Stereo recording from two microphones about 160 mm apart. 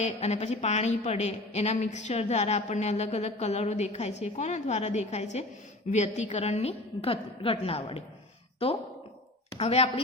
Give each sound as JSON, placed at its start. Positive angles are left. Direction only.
{"t": 0.0, "sound": "a woman's voice", "side_deg": 40}